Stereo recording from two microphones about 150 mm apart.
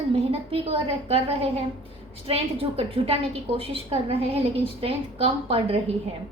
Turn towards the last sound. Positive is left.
turn(degrees=-40)  # may be behind; listen again after turning